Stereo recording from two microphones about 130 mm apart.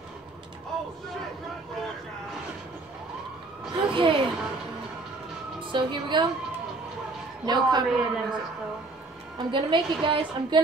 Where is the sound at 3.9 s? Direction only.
40° right (ahead or behind).